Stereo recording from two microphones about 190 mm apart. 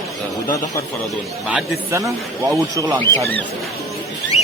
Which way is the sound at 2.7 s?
15° right (ahead or behind).